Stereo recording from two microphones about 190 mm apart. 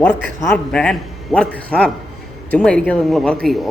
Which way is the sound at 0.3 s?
15° left (ahead or behind).